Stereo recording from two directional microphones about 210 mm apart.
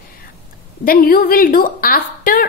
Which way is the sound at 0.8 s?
40° left (ahead or behind).